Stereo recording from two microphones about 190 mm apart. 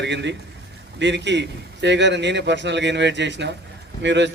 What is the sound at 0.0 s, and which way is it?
A man's voice, 65° right (ahead or behind).